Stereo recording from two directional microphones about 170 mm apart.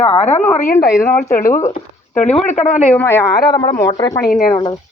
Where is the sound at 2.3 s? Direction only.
10° left (ahead or behind).